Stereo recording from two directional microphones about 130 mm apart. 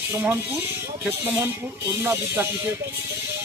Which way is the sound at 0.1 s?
20° right (ahead or behind).